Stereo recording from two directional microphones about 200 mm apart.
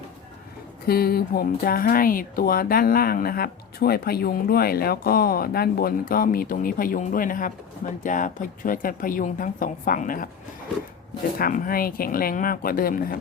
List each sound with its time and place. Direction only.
0.9 s speech: 50° left (ahead or behind)
11.3 s speech: 45° left (ahead or behind)